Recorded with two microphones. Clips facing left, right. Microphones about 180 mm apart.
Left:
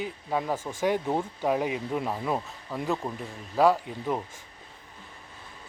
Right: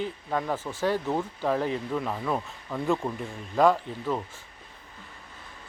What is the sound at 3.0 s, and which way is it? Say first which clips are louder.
Speech: right 2 dB; centre (ahead or behind).